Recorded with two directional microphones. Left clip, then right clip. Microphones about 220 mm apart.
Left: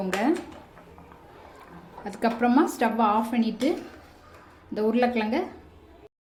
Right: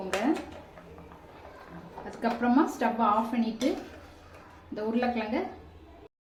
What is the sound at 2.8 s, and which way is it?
A woman's voice, 40° left (ahead or behind).